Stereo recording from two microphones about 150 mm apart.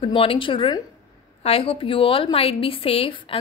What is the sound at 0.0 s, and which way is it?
A woman's voice, 40° left (ahead or behind).